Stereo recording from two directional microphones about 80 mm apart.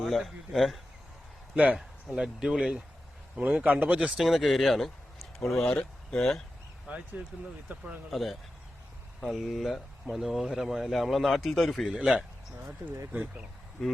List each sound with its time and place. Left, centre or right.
0.0 s speech: centre
2.0 s speech: centre
4.2 s speech: centre
6.8 s speech: centre
7.7 s speech: right
8.1 s speech: centre
11.9 s speech: centre
12.6 s speech: right
13.8 s speech: centre